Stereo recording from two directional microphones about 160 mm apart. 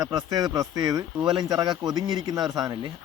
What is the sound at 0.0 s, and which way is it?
Speech, 25° right (ahead or behind).